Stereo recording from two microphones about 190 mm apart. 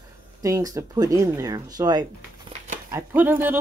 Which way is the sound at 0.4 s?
20° right (ahead or behind).